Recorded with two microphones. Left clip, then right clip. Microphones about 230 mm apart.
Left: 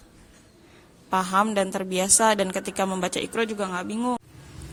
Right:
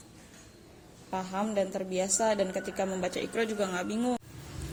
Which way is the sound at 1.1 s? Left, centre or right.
Left.